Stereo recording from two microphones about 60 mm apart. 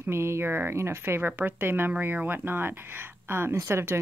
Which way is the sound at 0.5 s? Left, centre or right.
Right.